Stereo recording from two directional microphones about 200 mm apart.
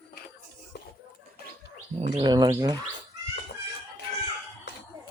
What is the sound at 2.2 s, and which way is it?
Bird, 20° right (ahead or behind).